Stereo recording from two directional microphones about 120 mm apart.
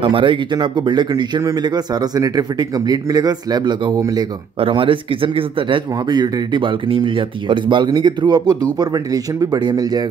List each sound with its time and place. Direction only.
0.0 s speech: 45° right (ahead or behind)
4.6 s speech: 45° right (ahead or behind)